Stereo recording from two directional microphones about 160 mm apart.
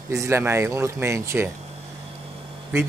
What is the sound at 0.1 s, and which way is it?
A man's voice, 15° right (ahead or behind).